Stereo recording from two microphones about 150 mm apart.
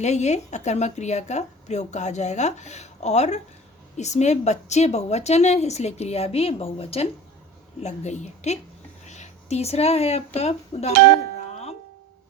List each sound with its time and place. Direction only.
0.0 s a woman's voice: 50° left (ahead or behind)